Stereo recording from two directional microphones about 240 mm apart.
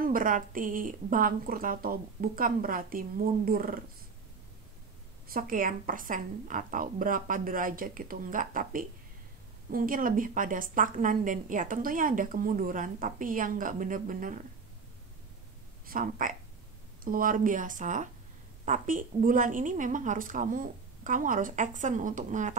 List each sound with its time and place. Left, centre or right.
0.0 s a woman's voice: right
5.3 s a woman's voice: right
15.9 s a woman's voice: right